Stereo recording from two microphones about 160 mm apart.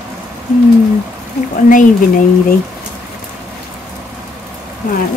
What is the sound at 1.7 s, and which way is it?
Speech, 55° left (ahead or behind).